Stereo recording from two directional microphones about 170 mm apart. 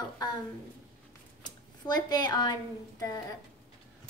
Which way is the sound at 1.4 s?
25° left (ahead or behind).